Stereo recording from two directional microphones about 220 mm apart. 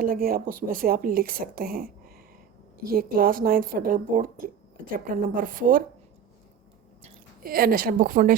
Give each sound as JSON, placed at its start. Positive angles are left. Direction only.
{"t": 0.0, "sound": "speech", "side_deg": -40}
{"t": 7.4, "sound": "speech", "side_deg": -40}